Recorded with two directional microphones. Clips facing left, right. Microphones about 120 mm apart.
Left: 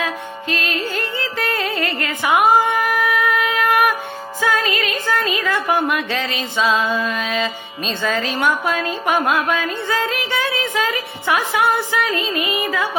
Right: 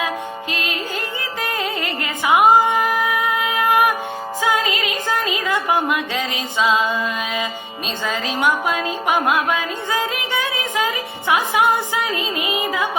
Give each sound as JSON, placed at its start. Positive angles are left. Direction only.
{"t": 0.0, "sound": "music", "side_deg": -15}
{"t": 4.4, "sound": "speech", "side_deg": -20}